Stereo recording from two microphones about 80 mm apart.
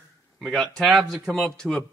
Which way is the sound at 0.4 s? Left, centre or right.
Centre.